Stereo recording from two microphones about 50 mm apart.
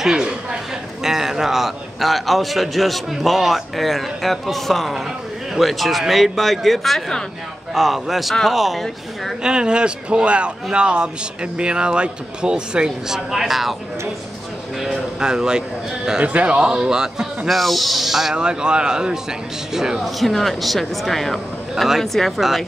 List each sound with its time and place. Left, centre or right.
0.0 s a sound: centre
1.0 s a man's voice: centre
9.4 s speech: centre
15.1 s speech: centre
16.2 s speech: right
17.5 s a man's voice: centre
18.3 s speech: centre
20.2 s a man's voice: centre